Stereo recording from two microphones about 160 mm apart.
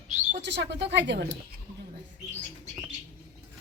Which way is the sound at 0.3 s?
90° right.